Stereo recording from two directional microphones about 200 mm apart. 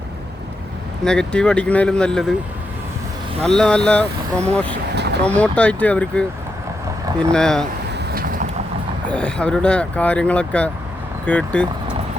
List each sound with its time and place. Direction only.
1.0 s speech: 5° left (ahead or behind)
3.4 s speech: 5° left (ahead or behind)
7.3 s speech: 5° left (ahead or behind)
7.9 s vehicle: 45° right (ahead or behind)
9.0 s speech: 5° left (ahead or behind)